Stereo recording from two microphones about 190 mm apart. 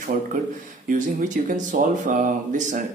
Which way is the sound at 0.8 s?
40° right (ahead or behind).